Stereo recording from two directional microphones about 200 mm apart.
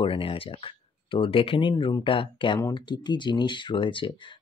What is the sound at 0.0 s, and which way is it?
Speech, 25° left (ahead or behind).